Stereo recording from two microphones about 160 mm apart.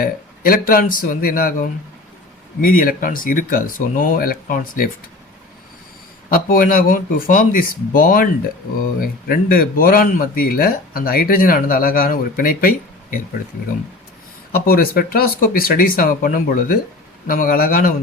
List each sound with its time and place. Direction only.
0.0 s speech: 65° left (ahead or behind)
6.3 s speech: 60° left (ahead or behind)
14.5 s speech: 70° left (ahead or behind)